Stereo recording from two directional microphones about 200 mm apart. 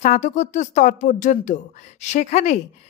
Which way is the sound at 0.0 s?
35° left (ahead or behind).